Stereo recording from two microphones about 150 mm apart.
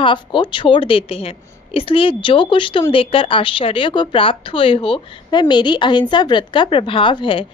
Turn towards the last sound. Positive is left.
turn(degrees=35)  # may be behind; listen again after turning